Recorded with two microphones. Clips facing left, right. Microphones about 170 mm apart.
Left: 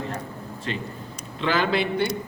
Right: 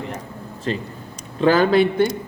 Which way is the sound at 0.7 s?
35° right (ahead or behind).